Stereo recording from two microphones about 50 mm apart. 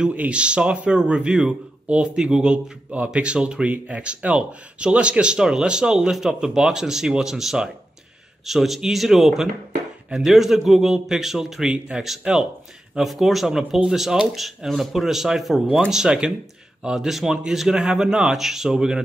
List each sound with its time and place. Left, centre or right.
0.1 s a man's voice: right